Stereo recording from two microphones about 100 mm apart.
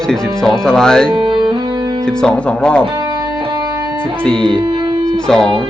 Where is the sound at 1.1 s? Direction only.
55° right (ahead or behind).